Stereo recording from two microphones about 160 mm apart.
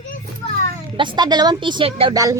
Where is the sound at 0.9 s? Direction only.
30° right (ahead or behind).